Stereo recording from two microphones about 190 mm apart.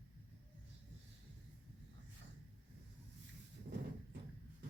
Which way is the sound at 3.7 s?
40° right (ahead or behind).